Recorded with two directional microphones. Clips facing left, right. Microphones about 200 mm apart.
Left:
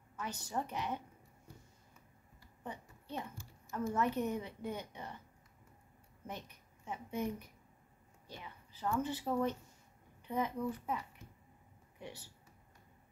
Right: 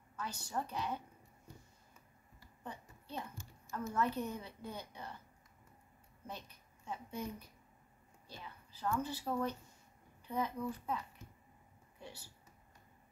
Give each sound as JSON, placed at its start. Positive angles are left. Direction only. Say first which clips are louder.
{"t": 0.2, "sound": "a woman's voice", "louder": "left 1 dB", "side_deg": 20}
{"t": 2.6, "sound": "a sound", "louder": "left 2 dB", "side_deg": 20}
{"t": 3.7, "sound": "a woman's voice", "louder": "left 2 dB", "side_deg": 20}
{"t": 6.2, "sound": "a woman's voice", "louder": "left 2 dB", "side_deg": 15}